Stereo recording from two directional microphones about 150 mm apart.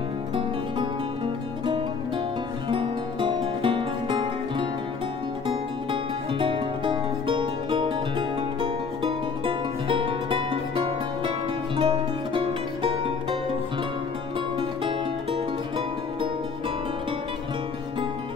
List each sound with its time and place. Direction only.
2.7 s music: 35° right (ahead or behind)
14.6 s music: 35° right (ahead or behind)